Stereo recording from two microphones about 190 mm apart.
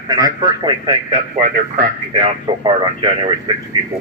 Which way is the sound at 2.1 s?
30° right (ahead or behind).